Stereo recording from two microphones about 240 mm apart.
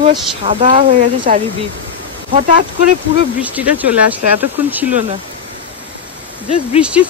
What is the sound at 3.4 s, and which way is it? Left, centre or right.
Speech, centre.